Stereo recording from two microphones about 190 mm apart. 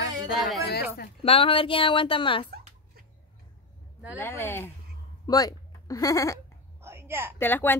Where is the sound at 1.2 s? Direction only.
30° left (ahead or behind).